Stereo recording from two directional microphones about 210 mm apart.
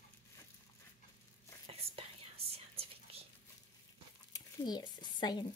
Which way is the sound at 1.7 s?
30° right (ahead or behind).